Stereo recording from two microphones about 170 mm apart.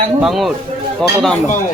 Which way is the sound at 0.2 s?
Centre (ahead or behind).